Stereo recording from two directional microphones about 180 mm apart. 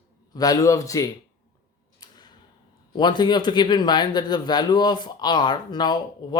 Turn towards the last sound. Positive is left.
turn(degrees=25)  # may be behind; listen again after turning